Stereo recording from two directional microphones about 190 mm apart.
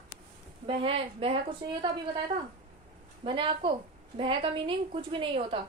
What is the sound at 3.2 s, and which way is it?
A woman's voice, 25° right (ahead or behind).